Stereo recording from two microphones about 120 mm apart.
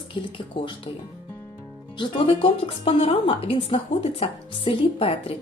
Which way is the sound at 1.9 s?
45° left (ahead or behind).